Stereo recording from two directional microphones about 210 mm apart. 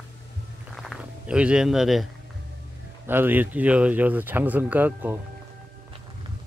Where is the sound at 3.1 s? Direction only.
10° right (ahead or behind).